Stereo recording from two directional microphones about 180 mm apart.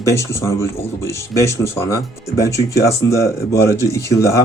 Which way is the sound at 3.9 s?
15° left (ahead or behind).